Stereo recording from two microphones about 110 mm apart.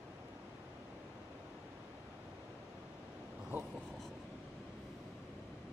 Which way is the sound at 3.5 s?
15° right (ahead or behind).